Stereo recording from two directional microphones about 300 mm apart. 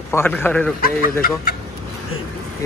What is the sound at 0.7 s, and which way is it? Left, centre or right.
Speech, left.